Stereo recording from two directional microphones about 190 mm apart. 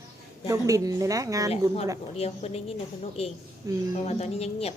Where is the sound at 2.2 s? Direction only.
35° left (ahead or behind).